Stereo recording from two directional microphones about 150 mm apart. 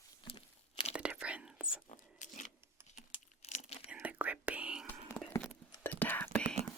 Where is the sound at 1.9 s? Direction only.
55° left (ahead or behind).